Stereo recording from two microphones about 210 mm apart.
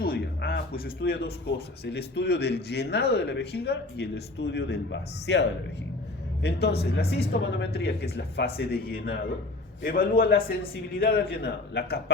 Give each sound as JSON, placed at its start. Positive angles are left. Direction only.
{"t": 0.0, "sound": "speech", "side_deg": 45}